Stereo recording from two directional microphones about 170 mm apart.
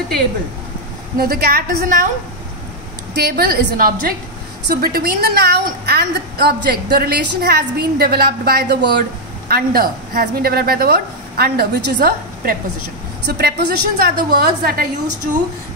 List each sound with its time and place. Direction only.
1.1 s a woman's voice: 60° right (ahead or behind)
3.2 s a woman's voice: 65° right (ahead or behind)
9.5 s a woman's voice: 60° right (ahead or behind)